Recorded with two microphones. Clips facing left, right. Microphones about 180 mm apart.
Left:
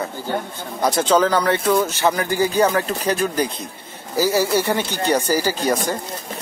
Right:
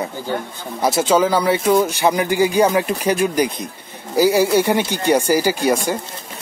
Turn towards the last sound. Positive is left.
turn(degrees=-10)  # may be behind; listen again after turning